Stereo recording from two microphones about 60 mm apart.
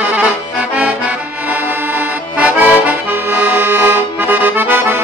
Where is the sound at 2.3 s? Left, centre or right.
Right.